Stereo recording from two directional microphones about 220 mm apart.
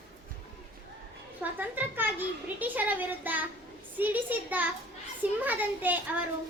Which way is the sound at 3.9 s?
10° right (ahead or behind).